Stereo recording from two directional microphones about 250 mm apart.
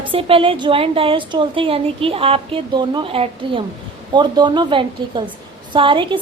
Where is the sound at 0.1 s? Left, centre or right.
Right.